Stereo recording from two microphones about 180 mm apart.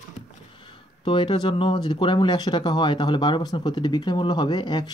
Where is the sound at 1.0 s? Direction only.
25° left (ahead or behind).